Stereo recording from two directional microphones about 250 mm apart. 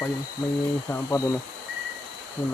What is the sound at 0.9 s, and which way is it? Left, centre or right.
Speech, centre.